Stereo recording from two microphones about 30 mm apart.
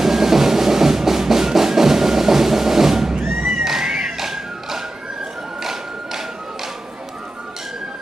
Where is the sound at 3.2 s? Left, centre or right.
Right.